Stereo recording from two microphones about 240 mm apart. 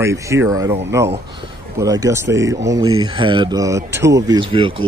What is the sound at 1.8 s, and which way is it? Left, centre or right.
Speech, centre.